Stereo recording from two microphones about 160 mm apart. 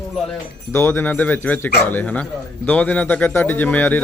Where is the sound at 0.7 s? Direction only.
15° left (ahead or behind).